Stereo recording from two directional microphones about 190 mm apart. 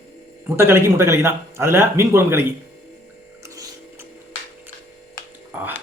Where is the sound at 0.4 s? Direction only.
10° right (ahead or behind).